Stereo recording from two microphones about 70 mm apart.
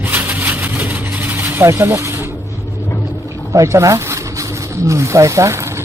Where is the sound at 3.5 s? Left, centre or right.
Right.